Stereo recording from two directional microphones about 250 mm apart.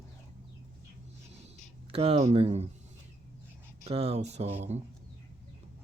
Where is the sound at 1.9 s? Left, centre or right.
Right.